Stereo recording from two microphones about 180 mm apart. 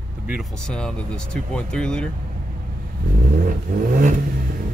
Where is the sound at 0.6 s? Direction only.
5° left (ahead or behind).